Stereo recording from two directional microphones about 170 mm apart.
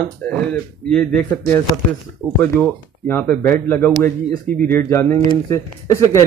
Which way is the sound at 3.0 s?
10° left (ahead or behind).